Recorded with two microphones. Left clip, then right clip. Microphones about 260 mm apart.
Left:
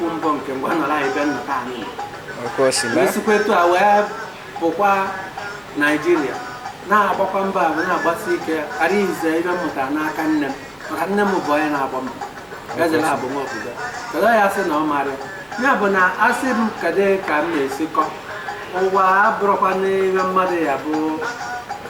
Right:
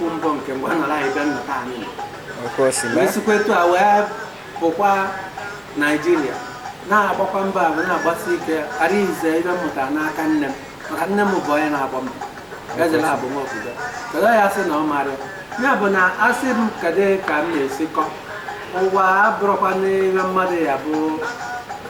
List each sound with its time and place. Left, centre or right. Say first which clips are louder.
0.2 s speech: left 1 dB; centre
2.6 s speech: left 1 dB; centre
11.4 s speech: even; centre